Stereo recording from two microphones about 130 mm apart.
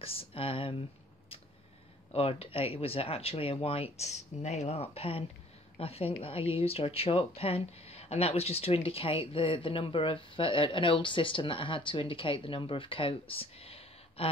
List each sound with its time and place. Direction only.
0.0 s speech: 45° left (ahead or behind)
2.1 s speech: 45° left (ahead or behind)